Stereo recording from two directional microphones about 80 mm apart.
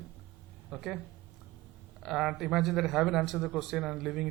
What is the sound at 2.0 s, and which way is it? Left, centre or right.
Speech, centre.